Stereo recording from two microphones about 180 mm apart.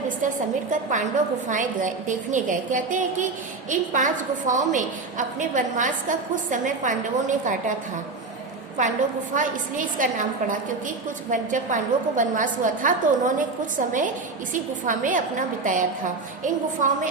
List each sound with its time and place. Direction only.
0.7 s a woman's voice: 45° right (ahead or behind)
8.8 s a woman's voice: 45° right (ahead or behind)